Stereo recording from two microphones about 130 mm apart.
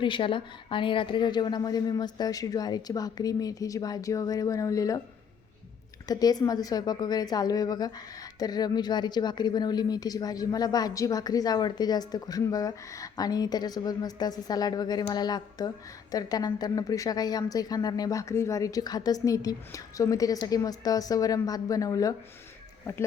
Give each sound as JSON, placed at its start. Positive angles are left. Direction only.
{"t": 0.0, "sound": "a woman's voice", "side_deg": 40}
{"t": 6.1, "sound": "a woman's voice", "side_deg": 30}